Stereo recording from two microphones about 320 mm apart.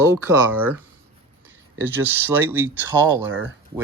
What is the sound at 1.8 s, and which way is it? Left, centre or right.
Speech, centre.